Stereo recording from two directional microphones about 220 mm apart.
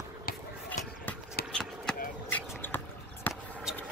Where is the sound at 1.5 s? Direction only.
5° left (ahead or behind).